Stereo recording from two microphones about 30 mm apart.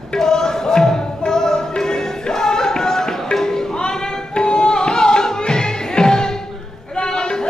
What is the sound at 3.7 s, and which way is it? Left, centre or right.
Music, left.